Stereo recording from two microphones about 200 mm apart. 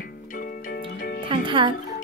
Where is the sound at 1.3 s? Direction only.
25° right (ahead or behind).